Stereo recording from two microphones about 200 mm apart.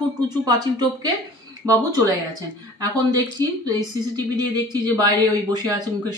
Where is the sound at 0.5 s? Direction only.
20° right (ahead or behind).